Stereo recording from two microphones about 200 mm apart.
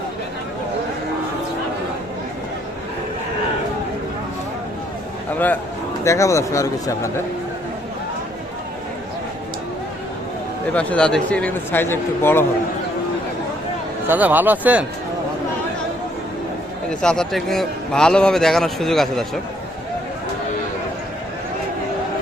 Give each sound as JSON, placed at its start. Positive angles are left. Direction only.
{"t": 6.1, "sound": "speech", "side_deg": 15}
{"t": 10.8, "sound": "speech", "side_deg": 5}
{"t": 14.1, "sound": "speech", "side_deg": -10}
{"t": 16.9, "sound": "a man's voice", "side_deg": 5}